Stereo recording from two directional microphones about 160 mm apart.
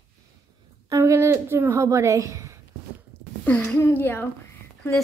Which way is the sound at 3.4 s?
10° left (ahead or behind).